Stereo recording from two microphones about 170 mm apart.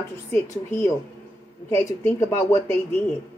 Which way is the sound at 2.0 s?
15° left (ahead or behind).